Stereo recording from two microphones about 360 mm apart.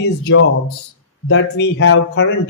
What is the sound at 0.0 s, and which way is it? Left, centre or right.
Speech, left.